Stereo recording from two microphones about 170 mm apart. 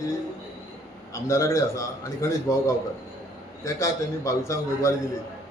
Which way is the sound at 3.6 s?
15° left (ahead or behind).